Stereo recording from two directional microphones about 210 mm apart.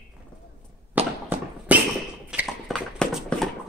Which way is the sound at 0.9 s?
10° right (ahead or behind).